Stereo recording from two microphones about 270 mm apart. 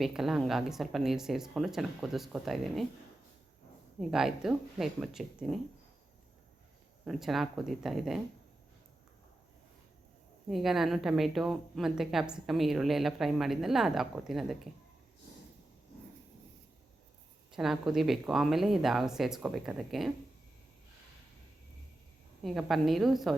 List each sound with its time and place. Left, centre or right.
0.0 s a woman's voice: centre
4.1 s a woman's voice: centre
7.0 s a woman's voice: centre
10.5 s a woman's voice: centre
17.5 s a woman's voice: centre
22.4 s a woman's voice: centre